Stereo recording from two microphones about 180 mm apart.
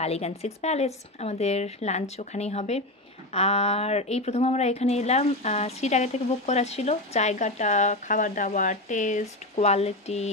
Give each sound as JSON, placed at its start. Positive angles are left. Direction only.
{"t": 0.0, "sound": "a woman's voice", "side_deg": 35}